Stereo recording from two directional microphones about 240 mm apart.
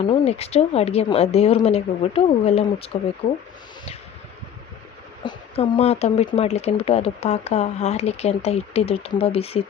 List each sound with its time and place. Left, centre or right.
0.0 s speech: left
3.2 s speech: left
5.2 s speech: left